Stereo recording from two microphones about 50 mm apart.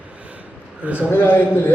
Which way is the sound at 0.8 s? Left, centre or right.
Right.